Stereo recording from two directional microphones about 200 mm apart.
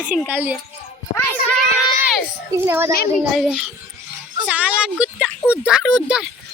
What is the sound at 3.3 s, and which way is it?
Speech, centre (ahead or behind).